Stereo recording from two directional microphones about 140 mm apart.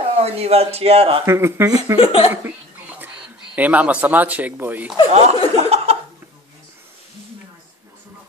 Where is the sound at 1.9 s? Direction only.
45° left (ahead or behind).